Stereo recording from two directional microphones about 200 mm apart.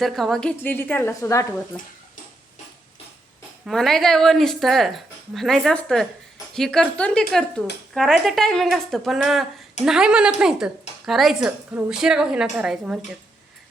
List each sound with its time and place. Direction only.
0.0 s a woman's voice: centre (ahead or behind)
3.7 s speech: centre (ahead or behind)